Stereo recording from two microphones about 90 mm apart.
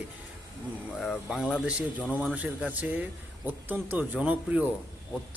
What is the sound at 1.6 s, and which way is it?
A man's voice, 15° right (ahead or behind).